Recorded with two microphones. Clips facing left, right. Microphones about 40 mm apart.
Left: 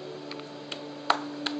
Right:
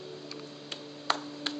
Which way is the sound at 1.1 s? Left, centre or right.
Centre.